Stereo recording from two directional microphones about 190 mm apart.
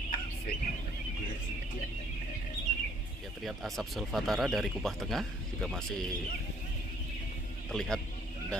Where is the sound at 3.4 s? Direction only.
Centre (ahead or behind).